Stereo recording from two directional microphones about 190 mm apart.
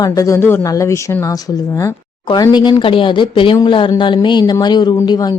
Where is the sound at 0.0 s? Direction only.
20° left (ahead or behind).